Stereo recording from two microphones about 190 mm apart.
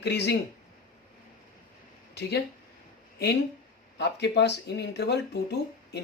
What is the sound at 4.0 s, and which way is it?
Speech, 65° left (ahead or behind).